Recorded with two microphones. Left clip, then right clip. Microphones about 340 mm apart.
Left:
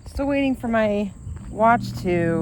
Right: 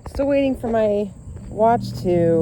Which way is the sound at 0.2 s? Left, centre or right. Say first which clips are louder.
Right 4 dB; centre.